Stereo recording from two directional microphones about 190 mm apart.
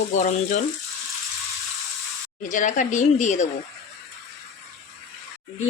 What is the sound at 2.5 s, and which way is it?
Speech, 40° left (ahead or behind).